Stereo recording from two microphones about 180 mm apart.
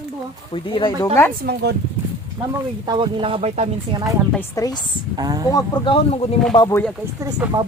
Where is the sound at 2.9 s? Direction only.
25° right (ahead or behind).